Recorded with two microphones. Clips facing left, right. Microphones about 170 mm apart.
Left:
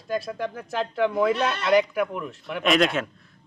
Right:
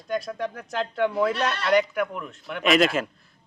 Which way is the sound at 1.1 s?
10° left (ahead or behind).